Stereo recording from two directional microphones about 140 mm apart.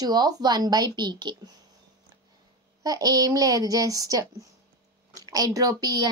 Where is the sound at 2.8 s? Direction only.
25° right (ahead or behind).